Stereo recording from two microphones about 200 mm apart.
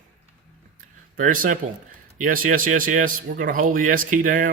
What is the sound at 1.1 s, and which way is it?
Speech, 45° right (ahead or behind).